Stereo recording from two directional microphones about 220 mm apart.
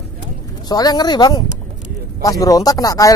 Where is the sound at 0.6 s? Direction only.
20° left (ahead or behind).